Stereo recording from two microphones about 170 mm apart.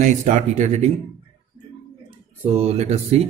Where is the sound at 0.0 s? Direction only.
45° right (ahead or behind).